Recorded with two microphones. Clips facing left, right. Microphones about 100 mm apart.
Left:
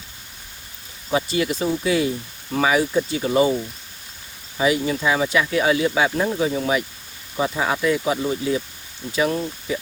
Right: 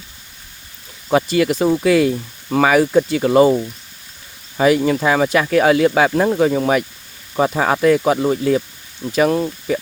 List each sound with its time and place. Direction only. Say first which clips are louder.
1.1 s speech: right 6 dB; 75° right (ahead or behind)
4.5 s speech: right 6 dB; 60° right (ahead or behind); by 6.6 s 80° right
7.3 s speech: right 6 dB; 60° right (ahead or behind)